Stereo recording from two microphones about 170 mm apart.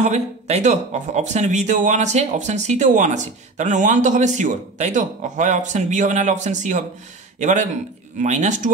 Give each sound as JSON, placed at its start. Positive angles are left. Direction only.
{"t": 0.0, "sound": "speech", "side_deg": -45}